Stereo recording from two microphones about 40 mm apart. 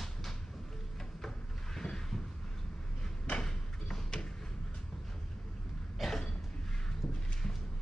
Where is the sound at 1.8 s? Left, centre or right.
Centre.